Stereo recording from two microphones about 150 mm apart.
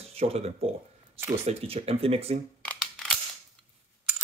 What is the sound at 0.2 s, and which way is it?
Speech, 40° right (ahead or behind).